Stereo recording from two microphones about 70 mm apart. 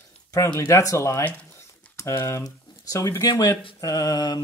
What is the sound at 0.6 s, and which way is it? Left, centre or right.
Speech, left.